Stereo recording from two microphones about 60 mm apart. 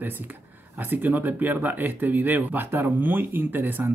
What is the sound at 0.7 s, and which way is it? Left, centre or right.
Speech, right.